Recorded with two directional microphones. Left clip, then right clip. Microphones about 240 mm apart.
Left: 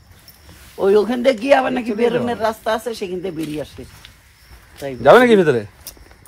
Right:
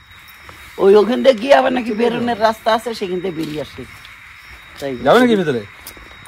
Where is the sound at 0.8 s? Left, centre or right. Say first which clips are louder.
Right 4 dB; right.